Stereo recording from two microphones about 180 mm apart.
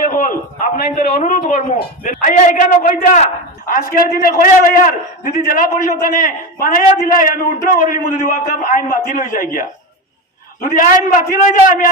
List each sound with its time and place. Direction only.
0.0 s a man's voice: 50° left (ahead or behind)
10.8 s a man's voice: 50° left (ahead or behind)